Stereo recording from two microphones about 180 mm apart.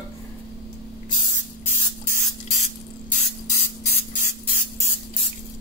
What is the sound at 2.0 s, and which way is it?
Spray, 40° left (ahead or behind).